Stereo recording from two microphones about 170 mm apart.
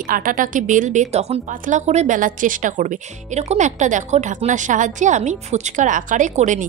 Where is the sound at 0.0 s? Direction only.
55° right (ahead or behind).